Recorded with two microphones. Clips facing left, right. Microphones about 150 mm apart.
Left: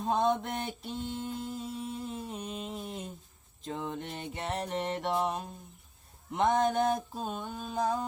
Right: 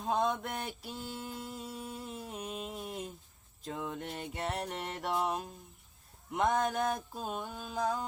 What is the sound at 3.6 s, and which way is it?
Music, centre (ahead or behind).